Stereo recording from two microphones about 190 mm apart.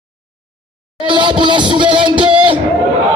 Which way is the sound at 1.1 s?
25° right (ahead or behind).